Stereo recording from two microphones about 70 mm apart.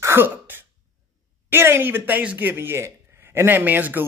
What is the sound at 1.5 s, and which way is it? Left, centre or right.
Speech, right.